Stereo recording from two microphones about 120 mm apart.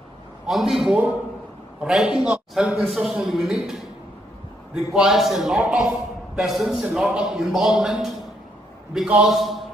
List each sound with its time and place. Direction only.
0.5 s a man's voice: centre (ahead or behind)
4.9 s a man's voice: 5° right (ahead or behind)